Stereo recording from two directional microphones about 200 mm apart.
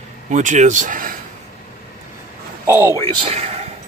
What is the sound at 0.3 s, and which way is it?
Speech, 40° right (ahead or behind).